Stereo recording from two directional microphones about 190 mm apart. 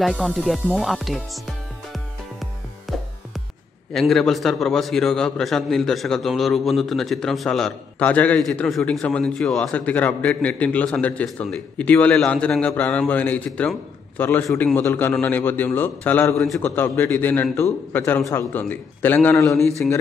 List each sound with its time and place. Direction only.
0.0 s music: centre (ahead or behind)
3.9 s a man's voice: centre (ahead or behind)